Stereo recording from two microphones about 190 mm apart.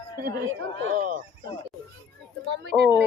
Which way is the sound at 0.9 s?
45° right (ahead or behind).